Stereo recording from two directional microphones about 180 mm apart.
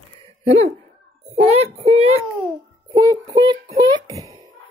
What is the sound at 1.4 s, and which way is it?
Child singing, 35° right (ahead or behind).